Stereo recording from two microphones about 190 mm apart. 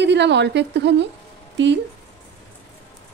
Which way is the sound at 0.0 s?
65° right (ahead or behind).